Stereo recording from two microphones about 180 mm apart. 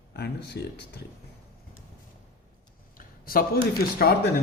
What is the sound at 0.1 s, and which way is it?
Speech, 65° left (ahead or behind).